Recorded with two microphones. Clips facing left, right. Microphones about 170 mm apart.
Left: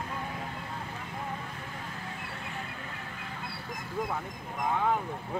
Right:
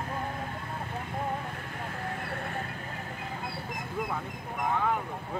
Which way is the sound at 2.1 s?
50° right (ahead or behind).